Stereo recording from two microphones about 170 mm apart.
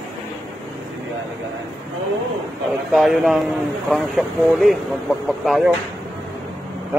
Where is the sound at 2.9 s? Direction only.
Centre (ahead or behind).